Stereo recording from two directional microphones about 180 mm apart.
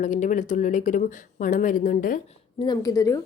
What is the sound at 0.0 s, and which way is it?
Speech, 45° left (ahead or behind).